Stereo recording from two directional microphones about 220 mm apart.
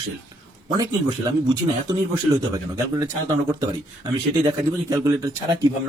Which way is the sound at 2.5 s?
15° right (ahead or behind).